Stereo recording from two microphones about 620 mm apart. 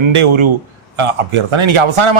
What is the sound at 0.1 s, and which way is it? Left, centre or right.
Speech, right.